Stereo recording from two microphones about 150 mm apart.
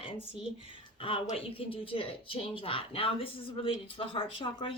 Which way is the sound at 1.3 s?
40° left (ahead or behind).